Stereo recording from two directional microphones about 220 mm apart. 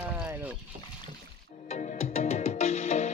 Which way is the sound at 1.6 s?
35° left (ahead or behind).